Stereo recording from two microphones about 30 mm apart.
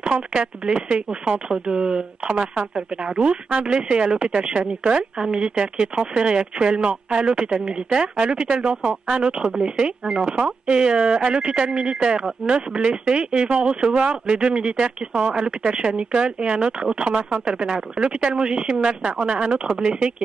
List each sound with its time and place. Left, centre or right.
0.0 s speech: right
1.5 s speech: right